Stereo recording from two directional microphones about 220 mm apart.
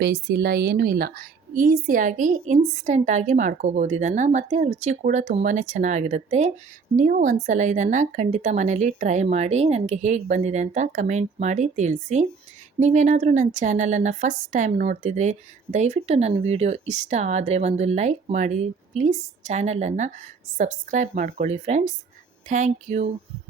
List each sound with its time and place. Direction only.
0.0 s a woman's voice: 50° right (ahead or behind)